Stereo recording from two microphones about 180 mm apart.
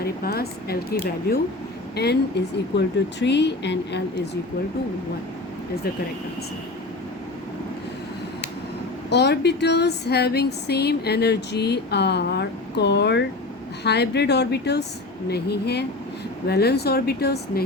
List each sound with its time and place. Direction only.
0.0 s speech: 55° left (ahead or behind); by 4.0 s 75° left (ahead or behind)
9.0 s speech: 70° left (ahead or behind)